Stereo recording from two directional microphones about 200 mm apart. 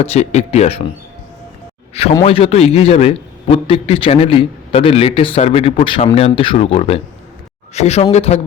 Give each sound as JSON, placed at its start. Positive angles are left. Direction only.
{"t": 0.0, "sound": "a man's voice", "side_deg": 30}
{"t": 2.2, "sound": "a man's voice", "side_deg": 30}